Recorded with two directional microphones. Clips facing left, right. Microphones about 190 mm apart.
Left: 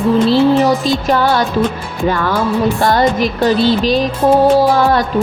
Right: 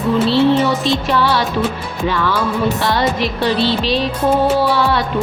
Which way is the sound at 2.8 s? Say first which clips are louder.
Left 4 dB; 45° left (ahead or behind).